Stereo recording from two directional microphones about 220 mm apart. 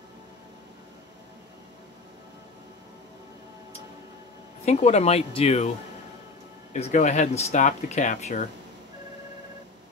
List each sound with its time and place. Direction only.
4.6 s speech: 30° left (ahead or behind)
6.7 s speech: 35° left (ahead or behind)